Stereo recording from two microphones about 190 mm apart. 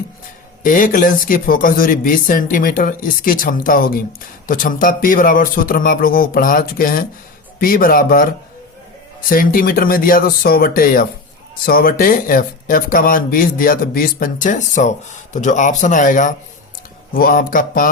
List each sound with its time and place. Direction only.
0.6 s speech: 45° left (ahead or behind)
9.3 s speech: 45° left (ahead or behind)